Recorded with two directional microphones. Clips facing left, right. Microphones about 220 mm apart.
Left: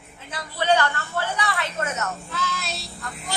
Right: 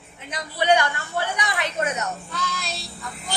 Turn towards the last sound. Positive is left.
turn(degrees=0)  # may be behind; listen again after turning